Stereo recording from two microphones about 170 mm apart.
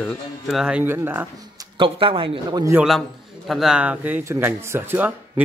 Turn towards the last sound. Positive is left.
turn(degrees=-10)  # may be behind; listen again after turning